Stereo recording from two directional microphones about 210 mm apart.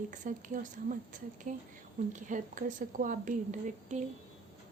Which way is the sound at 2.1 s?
35° right (ahead or behind).